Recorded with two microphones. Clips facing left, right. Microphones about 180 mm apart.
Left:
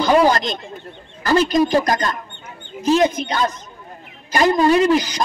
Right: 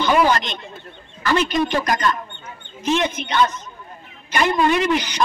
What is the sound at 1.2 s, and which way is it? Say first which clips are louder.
A woman's voice: left 4 dB; 40° left (ahead or behind).